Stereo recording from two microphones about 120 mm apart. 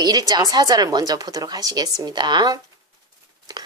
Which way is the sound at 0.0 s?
35° right (ahead or behind).